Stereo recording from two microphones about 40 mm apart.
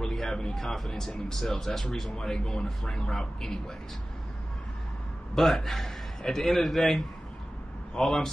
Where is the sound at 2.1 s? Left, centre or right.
Centre.